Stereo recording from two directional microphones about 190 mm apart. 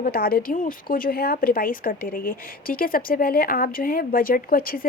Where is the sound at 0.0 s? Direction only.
50° left (ahead or behind).